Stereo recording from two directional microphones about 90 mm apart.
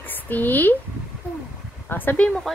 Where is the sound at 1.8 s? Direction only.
20° left (ahead or behind).